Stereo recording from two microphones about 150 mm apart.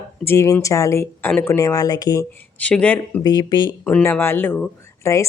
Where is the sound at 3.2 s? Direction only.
30° left (ahead or behind).